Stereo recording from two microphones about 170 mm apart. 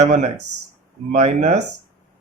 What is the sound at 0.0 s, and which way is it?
Speech, 45° right (ahead or behind).